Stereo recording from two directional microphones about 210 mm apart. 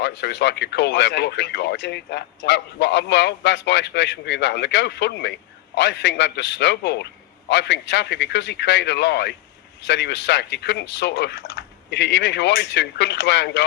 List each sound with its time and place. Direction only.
0.0 s speech: 55° left (ahead or behind)